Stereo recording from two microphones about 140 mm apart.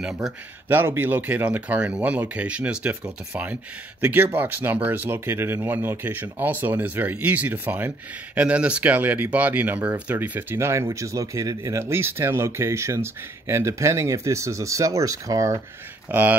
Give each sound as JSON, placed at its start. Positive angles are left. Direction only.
{"t": 0.0, "sound": "speech", "side_deg": -5}
{"t": 16.1, "sound": "speech", "side_deg": -10}